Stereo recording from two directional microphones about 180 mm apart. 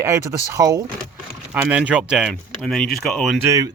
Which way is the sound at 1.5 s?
10° right (ahead or behind).